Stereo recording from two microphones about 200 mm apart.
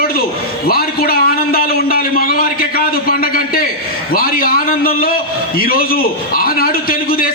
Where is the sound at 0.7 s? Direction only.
50° left (ahead or behind).